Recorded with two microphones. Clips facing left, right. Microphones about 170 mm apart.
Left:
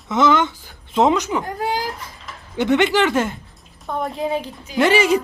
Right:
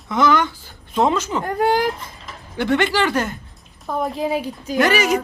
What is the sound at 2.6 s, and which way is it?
Speech, 20° left (ahead or behind).